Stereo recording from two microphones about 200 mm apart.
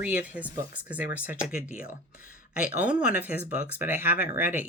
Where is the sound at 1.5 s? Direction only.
45° left (ahead or behind).